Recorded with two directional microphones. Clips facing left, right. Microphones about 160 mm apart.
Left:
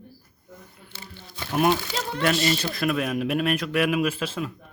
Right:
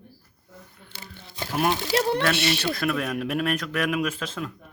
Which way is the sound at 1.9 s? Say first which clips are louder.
Right 2 dB; 70° right (ahead or behind).